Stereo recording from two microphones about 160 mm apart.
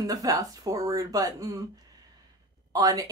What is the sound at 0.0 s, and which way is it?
A woman's voice, 20° right (ahead or behind).